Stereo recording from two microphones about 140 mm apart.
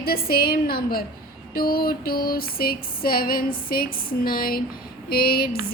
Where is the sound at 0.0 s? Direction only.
90° left.